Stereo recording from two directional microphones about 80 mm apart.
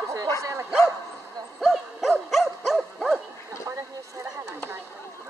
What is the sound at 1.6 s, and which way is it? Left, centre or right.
Dog, centre.